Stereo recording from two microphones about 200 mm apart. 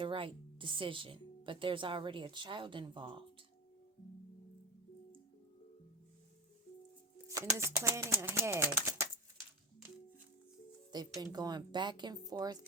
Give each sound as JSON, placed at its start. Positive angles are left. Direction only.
{"t": 0.0, "sound": "speech", "side_deg": -25}
{"t": 7.3, "sound": "speech", "side_deg": -15}
{"t": 10.9, "sound": "speech", "side_deg": -20}